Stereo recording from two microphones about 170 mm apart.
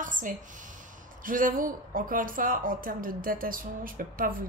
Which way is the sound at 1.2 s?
55° right (ahead or behind).